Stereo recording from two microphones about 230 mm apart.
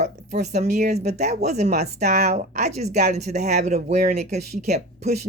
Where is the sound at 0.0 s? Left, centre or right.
Right.